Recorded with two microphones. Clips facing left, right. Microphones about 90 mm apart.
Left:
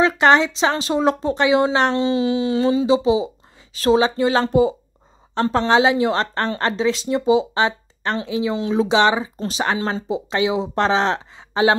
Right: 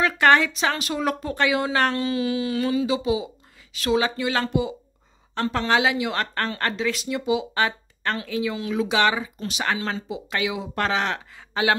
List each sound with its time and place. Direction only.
0.0 s speech: 20° left (ahead or behind)